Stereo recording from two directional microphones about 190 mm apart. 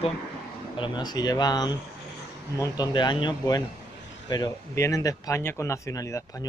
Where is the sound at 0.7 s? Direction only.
25° left (ahead or behind).